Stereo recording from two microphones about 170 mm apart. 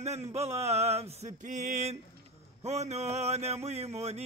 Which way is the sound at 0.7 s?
40° right (ahead or behind).